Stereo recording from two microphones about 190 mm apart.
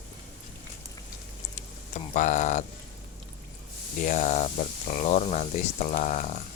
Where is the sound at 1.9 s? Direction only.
40° left (ahead or behind).